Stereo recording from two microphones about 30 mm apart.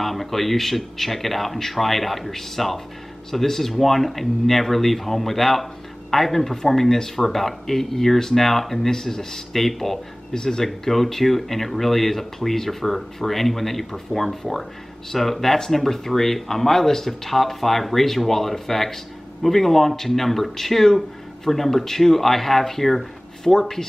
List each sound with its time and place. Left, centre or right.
0.0 s speech: centre
10.3 s speech: left
10.6 s speech: centre